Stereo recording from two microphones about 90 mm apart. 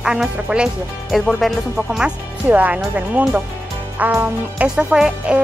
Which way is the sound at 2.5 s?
15° right (ahead or behind).